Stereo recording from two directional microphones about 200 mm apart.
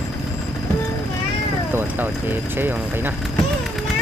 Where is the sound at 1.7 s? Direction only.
10° right (ahead or behind).